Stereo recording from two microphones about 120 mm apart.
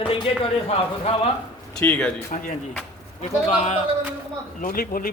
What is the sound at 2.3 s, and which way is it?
Speech, 90° left.